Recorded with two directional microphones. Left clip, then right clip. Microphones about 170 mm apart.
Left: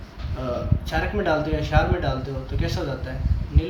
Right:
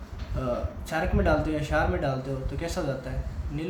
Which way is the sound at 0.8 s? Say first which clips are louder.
Left 2 dB; 70° right (ahead or behind).